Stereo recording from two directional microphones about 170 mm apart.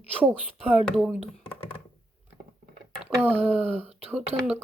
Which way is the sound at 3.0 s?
10° right (ahead or behind).